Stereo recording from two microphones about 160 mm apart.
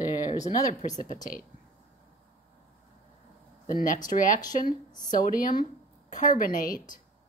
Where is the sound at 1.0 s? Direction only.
55° left (ahead or behind).